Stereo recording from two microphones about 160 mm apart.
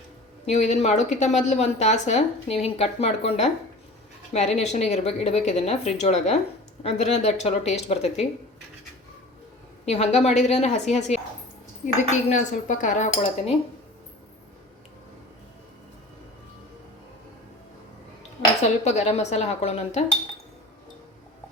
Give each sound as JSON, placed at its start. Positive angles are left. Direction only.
{"t": 0.4, "sound": "a woman's voice", "side_deg": 45}
{"t": 9.8, "sound": "speech", "side_deg": 45}
{"t": 18.9, "sound": "speech", "side_deg": 45}